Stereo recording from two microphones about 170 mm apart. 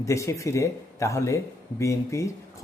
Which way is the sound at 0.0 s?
15° left (ahead or behind).